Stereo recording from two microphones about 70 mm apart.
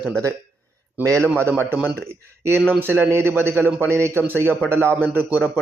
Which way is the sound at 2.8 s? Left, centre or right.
Right.